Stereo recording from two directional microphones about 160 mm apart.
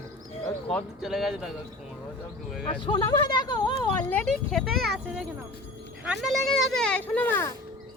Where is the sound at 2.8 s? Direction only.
30° left (ahead or behind).